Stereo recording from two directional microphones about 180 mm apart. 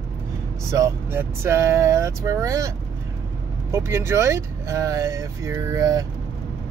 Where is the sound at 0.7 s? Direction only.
15° right (ahead or behind).